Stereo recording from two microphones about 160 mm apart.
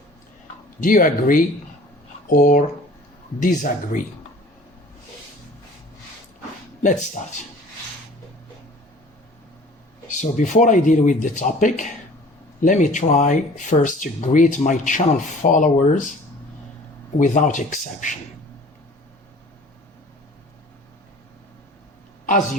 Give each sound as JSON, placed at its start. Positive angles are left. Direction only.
{"t": 0.8, "sound": "speech", "side_deg": 60}
{"t": 6.8, "sound": "speech", "side_deg": 50}
{"t": 10.2, "sound": "speech", "side_deg": 50}
{"t": 17.2, "sound": "speech", "side_deg": 50}